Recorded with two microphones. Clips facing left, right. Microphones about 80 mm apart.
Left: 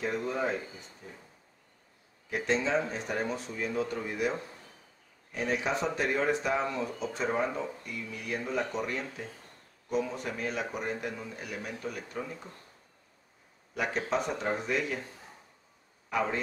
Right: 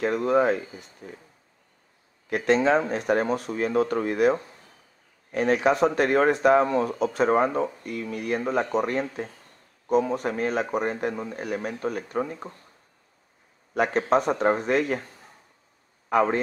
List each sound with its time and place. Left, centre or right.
0.0 s speech: right
2.2 s a man's voice: right
13.7 s a man's voice: right
16.1 s a man's voice: right